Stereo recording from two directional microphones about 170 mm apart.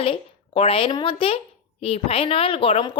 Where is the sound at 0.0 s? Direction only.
35° left (ahead or behind).